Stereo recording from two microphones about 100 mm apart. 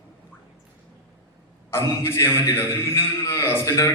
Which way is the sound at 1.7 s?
25° left (ahead or behind).